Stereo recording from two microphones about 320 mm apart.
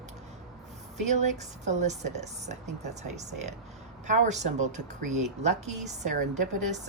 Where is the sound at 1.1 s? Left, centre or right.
Right.